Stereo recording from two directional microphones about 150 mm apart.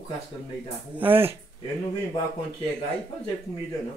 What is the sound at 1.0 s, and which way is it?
Speech, 15° right (ahead or behind).